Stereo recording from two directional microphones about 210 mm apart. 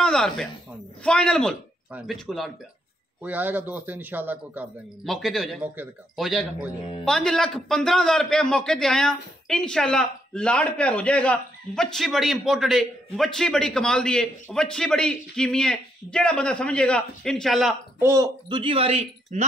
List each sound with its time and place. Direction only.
0.0 s a man's voice: 5° left (ahead or behind)
18.0 s speech: 15° right (ahead or behind)